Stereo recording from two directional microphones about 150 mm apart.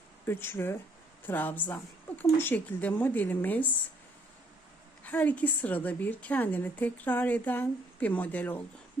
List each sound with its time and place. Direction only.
0.3 s a woman's voice: 15° left (ahead or behind)
5.0 s a woman's voice: 10° left (ahead or behind)